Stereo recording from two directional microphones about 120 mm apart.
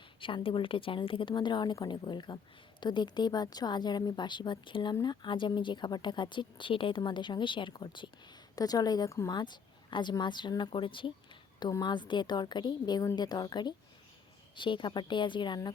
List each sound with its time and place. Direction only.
0.2 s speech: 45° left (ahead or behind)